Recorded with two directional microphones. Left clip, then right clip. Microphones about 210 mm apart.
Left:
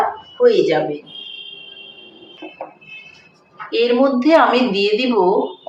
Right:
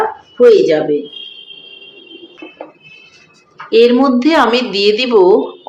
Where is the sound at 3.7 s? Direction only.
55° right (ahead or behind).